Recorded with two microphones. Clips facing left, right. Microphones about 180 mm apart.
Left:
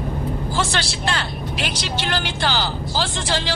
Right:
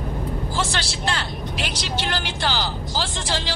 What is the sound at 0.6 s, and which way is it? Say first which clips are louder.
Vehicle: left 3 dB; 65° left (ahead or behind).